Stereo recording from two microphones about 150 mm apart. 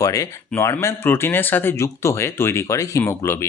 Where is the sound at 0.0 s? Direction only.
20° left (ahead or behind).